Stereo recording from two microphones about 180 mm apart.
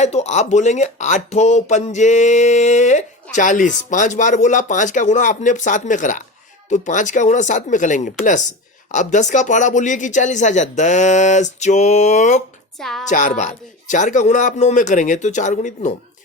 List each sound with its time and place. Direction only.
0.0 s a man's voice: 40° left (ahead or behind)
12.8 s a woman's voice: centre (ahead or behind)
13.1 s a man's voice: 45° left (ahead or behind)